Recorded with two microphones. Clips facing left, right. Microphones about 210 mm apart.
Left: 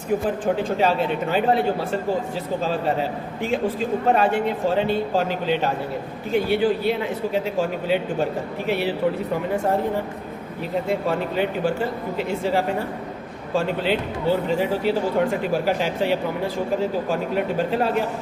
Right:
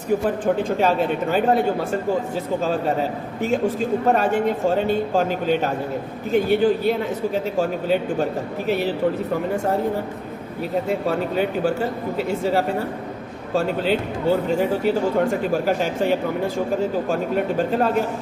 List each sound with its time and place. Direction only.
0.8 s a man's voice: 45° right (ahead or behind)
10.8 s a man's voice: 40° right (ahead or behind)